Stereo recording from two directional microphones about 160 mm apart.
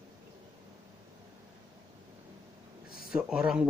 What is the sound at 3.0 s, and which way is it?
Speech, 5° right (ahead or behind).